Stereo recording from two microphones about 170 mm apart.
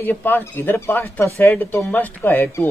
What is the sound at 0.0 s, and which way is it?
Speech, 10° left (ahead or behind).